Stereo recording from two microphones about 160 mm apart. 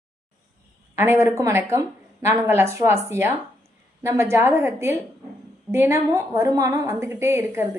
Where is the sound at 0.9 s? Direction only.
15° right (ahead or behind).